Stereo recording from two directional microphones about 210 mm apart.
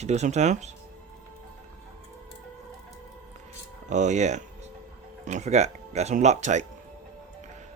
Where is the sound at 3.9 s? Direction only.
35° right (ahead or behind).